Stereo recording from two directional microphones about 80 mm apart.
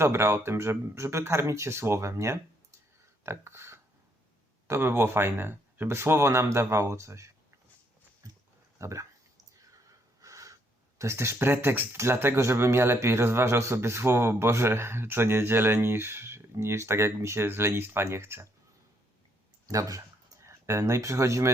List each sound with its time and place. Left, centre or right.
0.0 s speech: right
3.2 s a sound: right
4.7 s speech: right
8.2 s a sound: right
8.8 s speech: right
9.7 s gasp: right
11.9 s speech: right
19.6 s speech: right